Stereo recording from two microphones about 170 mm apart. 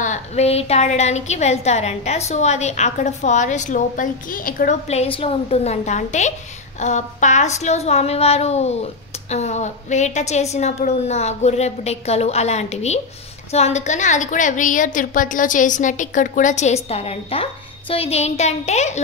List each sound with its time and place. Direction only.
0.0 s a woman's voice: 40° left (ahead or behind)
4.8 s a woman's voice: 35° left (ahead or behind)